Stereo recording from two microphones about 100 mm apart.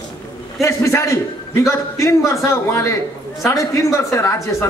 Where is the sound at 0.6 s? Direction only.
30° left (ahead or behind).